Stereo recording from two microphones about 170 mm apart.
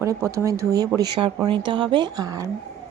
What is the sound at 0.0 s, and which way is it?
A woman's voice, 15° right (ahead or behind).